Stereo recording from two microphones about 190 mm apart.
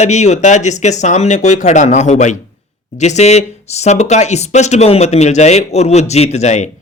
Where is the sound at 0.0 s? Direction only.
35° left (ahead or behind).